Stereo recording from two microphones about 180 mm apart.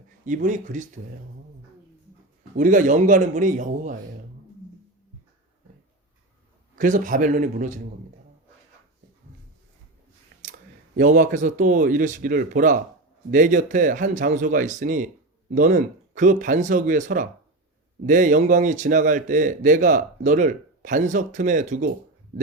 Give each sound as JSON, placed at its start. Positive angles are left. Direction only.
{"t": 0.3, "sound": "speech", "side_deg": -45}
{"t": 2.6, "sound": "speech", "side_deg": -45}
{"t": 6.7, "sound": "speech", "side_deg": -45}
{"t": 10.9, "sound": "speech", "side_deg": -45}